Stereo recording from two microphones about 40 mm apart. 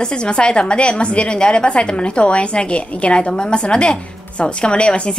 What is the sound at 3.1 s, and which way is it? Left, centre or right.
A woman's voice, left.